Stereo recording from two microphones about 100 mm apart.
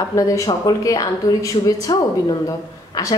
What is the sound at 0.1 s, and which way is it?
Speech, 35° left (ahead or behind).